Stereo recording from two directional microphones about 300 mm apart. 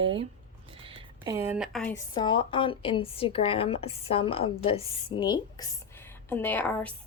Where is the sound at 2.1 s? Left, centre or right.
Centre.